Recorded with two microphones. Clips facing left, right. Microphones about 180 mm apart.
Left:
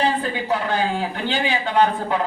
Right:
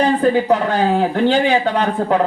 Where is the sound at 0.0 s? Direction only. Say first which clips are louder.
Right 8 dB; 40° right (ahead or behind).